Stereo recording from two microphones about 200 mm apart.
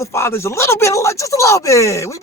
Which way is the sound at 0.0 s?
15° left (ahead or behind).